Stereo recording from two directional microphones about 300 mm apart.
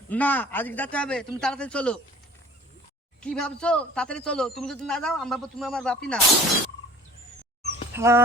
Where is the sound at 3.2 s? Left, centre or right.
Centre.